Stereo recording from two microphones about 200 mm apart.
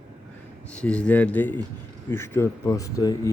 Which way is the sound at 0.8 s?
5° left (ahead or behind).